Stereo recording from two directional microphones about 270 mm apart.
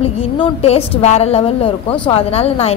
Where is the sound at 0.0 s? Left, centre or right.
Left.